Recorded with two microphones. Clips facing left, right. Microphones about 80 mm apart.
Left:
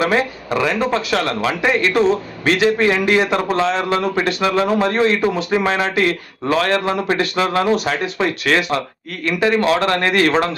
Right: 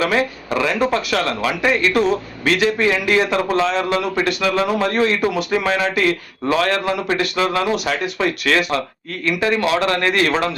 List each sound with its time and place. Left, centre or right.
0.0 s a man's voice: left